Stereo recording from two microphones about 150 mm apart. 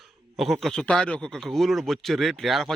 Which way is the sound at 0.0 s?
Centre (ahead or behind).